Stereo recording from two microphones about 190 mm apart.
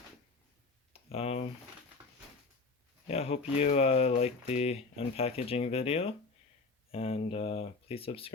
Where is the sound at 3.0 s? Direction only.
35° left (ahead or behind).